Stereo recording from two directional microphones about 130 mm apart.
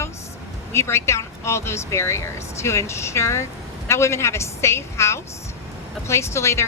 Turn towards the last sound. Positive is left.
turn(degrees=20)  # may be behind; listen again after turning